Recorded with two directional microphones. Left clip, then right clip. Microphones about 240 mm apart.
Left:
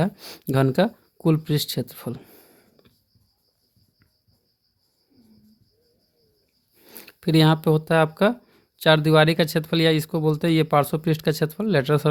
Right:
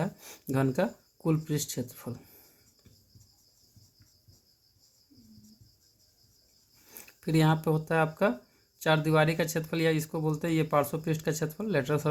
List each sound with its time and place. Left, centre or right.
0.0 s speech: left
6.8 s speech: left